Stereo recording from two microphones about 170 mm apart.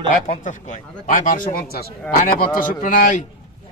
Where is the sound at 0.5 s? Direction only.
50° left (ahead or behind).